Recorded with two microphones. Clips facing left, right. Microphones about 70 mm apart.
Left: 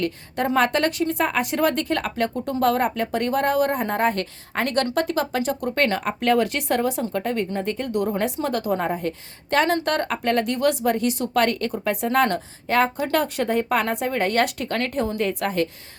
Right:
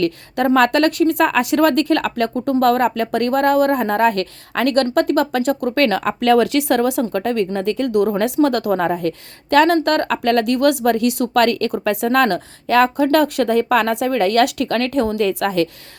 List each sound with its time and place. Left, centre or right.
0.0 s speech: right
5.7 s speech: right